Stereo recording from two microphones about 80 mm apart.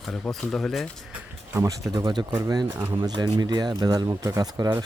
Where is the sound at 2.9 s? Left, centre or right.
Right.